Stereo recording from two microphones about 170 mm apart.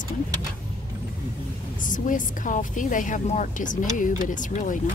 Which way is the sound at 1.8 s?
50° left (ahead or behind).